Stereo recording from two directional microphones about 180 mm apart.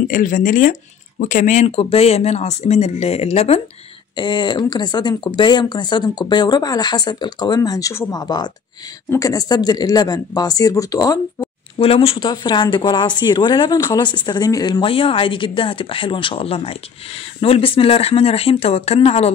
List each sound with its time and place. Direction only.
0.1 s speech: 45° left (ahead or behind)
4.2 s speech: 25° left (ahead or behind)
11.8 s speech: 30° left (ahead or behind)